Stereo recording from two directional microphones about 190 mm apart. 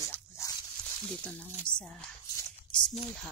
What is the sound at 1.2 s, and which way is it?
Speech, 5° left (ahead or behind).